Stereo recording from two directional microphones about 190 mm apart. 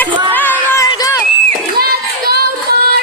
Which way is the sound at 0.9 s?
20° left (ahead or behind).